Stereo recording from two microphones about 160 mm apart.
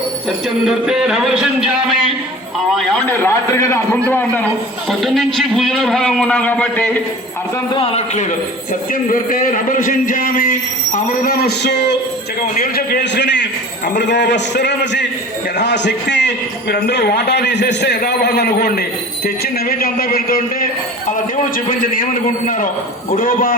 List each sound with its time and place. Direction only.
0.4 s a man's voice: centre (ahead or behind)
3.1 s a man's voice: 15° left (ahead or behind)
4.9 s a man's voice: centre (ahead or behind)
7.7 s a man's voice: 35° left (ahead or behind)
8.9 s a man's voice: 60° left (ahead or behind); by 11.9 s 90° left
12.7 s a man's voice: 80° left
22.4 s a man's voice: 60° left (ahead or behind)